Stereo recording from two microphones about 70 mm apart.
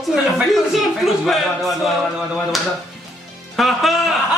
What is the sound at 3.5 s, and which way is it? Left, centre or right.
Speech, centre.